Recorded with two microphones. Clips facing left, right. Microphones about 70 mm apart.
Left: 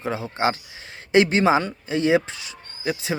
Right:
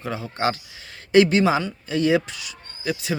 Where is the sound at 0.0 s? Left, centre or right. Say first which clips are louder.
Left 1 dB; left.